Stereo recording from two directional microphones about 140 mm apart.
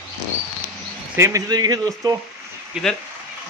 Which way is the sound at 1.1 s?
20° right (ahead or behind).